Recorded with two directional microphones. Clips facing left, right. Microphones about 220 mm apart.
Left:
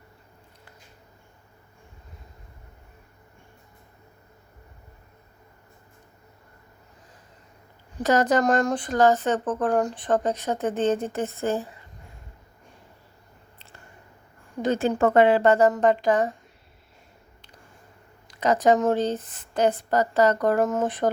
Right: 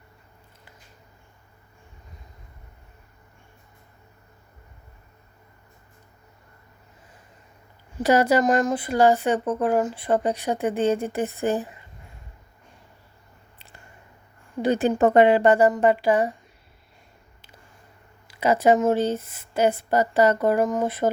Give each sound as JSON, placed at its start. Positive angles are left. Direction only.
{"t": 8.0, "sound": "speech", "side_deg": -10}
{"t": 14.6, "sound": "speech", "side_deg": -15}
{"t": 18.3, "sound": "speech", "side_deg": -10}